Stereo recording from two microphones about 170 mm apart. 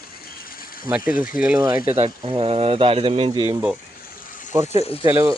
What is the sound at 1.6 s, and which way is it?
Speech, 20° right (ahead or behind).